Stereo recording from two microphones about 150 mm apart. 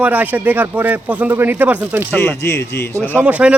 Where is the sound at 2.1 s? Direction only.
15° left (ahead or behind).